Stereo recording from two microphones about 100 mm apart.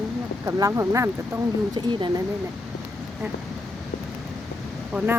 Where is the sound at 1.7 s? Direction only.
50° right (ahead or behind).